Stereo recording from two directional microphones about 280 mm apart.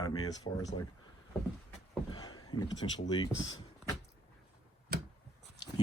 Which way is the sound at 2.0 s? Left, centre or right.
Centre.